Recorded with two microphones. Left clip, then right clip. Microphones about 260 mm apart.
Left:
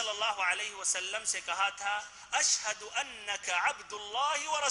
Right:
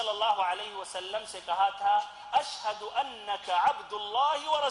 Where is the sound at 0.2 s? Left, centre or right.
Centre.